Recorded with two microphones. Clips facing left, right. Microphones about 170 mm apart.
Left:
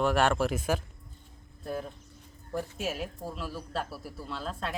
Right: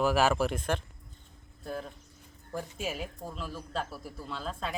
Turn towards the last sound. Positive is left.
turn(degrees=0)  # may be behind; listen again after turning